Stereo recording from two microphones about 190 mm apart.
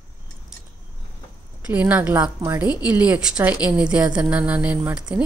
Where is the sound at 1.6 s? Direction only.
10° right (ahead or behind).